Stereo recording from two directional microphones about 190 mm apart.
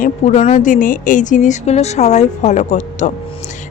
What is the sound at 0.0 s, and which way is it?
A woman's voice, 35° left (ahead or behind).